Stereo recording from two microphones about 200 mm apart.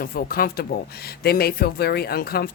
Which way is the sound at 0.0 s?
45° left (ahead or behind).